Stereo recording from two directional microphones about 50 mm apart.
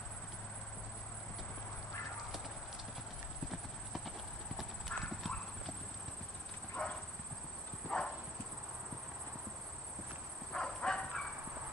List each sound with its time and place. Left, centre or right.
4.6 s clip-clop: centre
6.8 s clip-clop: centre
10.5 s bow-wow: centre